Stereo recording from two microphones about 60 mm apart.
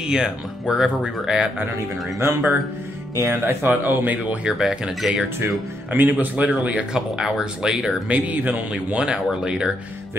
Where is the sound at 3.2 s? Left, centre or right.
Right.